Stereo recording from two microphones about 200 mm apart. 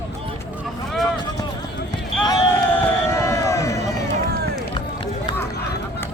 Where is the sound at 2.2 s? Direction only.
20° left (ahead or behind).